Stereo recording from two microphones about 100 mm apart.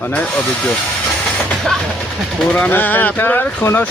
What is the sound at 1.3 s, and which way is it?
Train, 5° left (ahead or behind).